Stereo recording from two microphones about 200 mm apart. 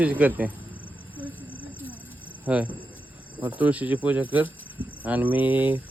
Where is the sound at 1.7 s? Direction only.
10° left (ahead or behind).